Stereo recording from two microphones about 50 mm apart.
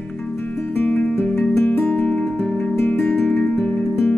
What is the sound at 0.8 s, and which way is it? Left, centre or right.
Music, left.